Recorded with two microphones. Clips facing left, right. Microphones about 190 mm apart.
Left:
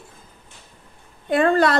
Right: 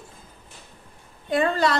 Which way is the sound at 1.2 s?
55° left (ahead or behind).